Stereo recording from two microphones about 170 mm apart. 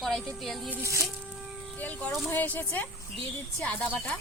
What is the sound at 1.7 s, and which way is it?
Speech, 10° left (ahead or behind).